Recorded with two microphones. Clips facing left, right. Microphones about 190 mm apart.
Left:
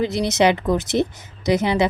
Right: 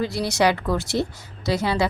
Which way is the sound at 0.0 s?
20° left (ahead or behind).